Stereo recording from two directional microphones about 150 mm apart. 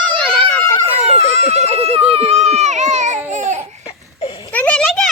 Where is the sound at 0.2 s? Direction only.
5° left (ahead or behind).